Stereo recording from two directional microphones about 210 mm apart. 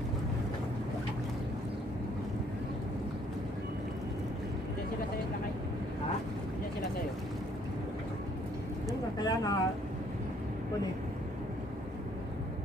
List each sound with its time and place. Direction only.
9.2 s boat: 20° left (ahead or behind)